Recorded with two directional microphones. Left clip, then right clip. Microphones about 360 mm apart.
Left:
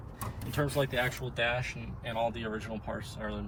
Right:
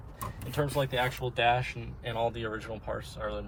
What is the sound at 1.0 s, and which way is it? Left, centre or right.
Speech, right.